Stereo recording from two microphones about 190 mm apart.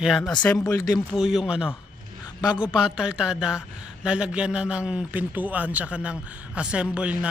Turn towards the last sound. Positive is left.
turn(degrees=-5)  # may be behind; listen again after turning